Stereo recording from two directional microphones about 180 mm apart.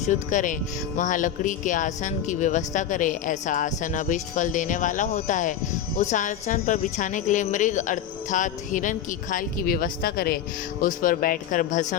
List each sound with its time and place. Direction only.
0.0 s speech: 45° left (ahead or behind)